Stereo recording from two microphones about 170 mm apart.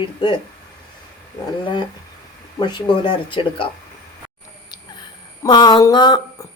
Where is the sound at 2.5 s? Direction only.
25° left (ahead or behind).